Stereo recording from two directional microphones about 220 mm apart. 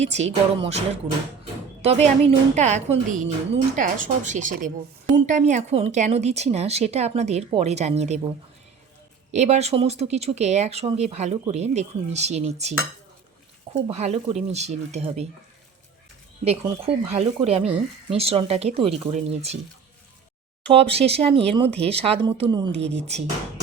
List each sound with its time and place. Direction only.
0.0 s speech: 30° right (ahead or behind)
1.8 s a woman's voice: 30° right (ahead or behind)
9.3 s speech: 30° right (ahead or behind)
13.8 s speech: 30° right (ahead or behind)
16.4 s speech: 30° right (ahead or behind)
20.7 s speech: 25° right (ahead or behind)